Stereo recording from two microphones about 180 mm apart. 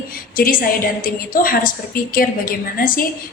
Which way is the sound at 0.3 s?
50° left (ahead or behind).